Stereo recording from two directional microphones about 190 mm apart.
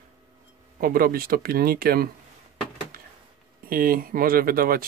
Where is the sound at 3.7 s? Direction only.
50° right (ahead or behind).